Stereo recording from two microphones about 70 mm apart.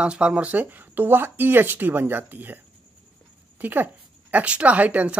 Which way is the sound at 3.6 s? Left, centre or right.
Right.